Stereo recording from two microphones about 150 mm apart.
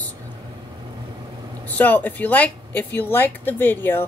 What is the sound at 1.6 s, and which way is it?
Speech, 10° left (ahead or behind).